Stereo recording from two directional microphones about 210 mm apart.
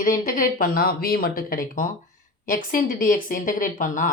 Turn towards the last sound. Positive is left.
turn(degrees=40)  # may be behind; listen again after turning